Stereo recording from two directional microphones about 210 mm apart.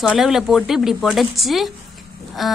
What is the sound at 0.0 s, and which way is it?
A woman's voice, centre (ahead or behind).